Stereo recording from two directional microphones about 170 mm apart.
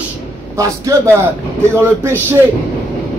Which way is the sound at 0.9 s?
20° right (ahead or behind).